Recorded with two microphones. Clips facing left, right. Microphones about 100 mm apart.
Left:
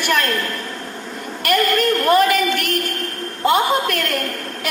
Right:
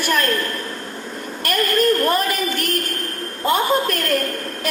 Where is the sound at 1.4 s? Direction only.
35° right (ahead or behind).